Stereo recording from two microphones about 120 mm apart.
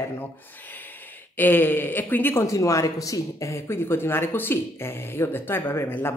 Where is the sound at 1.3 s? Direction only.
15° left (ahead or behind).